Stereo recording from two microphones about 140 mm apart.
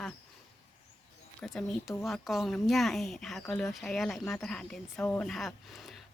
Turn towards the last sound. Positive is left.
turn(degrees=0)  # may be behind; listen again after turning